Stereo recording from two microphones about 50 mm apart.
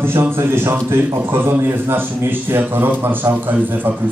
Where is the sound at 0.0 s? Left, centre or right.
Right.